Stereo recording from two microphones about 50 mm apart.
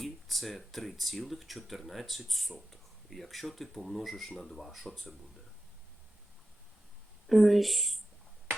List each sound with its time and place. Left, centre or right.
0.0 s speech: centre
7.3 s speech: centre